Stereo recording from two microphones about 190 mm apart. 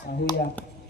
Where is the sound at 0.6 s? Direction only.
10° left (ahead or behind).